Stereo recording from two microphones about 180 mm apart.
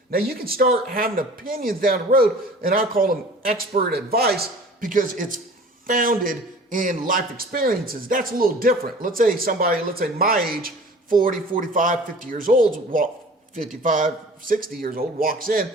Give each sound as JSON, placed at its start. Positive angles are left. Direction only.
{"t": 0.1, "sound": "speech", "side_deg": -55}